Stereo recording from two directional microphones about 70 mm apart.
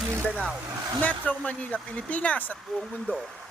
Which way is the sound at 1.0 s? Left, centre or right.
Left.